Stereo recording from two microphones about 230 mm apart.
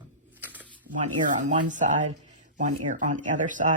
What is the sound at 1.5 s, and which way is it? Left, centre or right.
Speech, right.